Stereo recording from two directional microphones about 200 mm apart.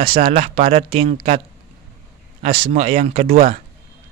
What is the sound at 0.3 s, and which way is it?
Speech, 35° right (ahead or behind).